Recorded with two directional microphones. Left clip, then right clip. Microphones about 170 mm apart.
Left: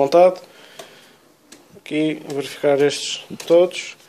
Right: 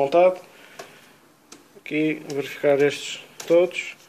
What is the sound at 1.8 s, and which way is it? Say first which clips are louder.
Speech: left 2 dB; 15° left (ahead or behind).